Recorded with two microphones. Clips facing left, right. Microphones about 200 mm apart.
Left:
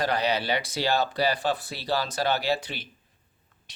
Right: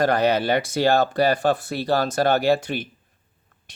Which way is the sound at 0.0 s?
50° right (ahead or behind).